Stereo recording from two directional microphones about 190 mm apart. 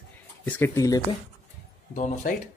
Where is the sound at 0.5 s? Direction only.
15° left (ahead or behind).